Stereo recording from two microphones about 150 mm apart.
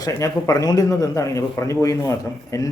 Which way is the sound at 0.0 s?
25° left (ahead or behind).